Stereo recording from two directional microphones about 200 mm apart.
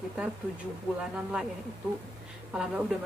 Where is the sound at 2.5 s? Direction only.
5° right (ahead or behind).